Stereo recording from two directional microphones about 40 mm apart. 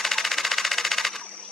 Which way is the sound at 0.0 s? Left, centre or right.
Centre.